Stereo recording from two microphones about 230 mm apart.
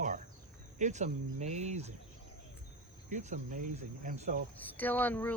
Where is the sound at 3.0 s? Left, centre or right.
Right.